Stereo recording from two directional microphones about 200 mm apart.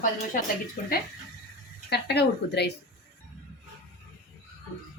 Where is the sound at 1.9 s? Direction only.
55° left (ahead or behind).